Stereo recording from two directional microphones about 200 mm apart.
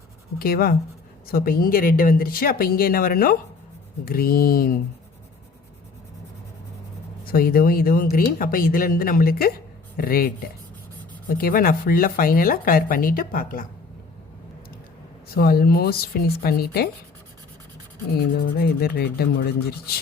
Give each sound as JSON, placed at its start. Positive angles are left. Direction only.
{"t": 0.3, "sound": "speech", "side_deg": 50}
{"t": 7.3, "sound": "speech", "side_deg": 45}
{"t": 15.4, "sound": "speech", "side_deg": 50}
{"t": 18.4, "sound": "speech", "side_deg": 45}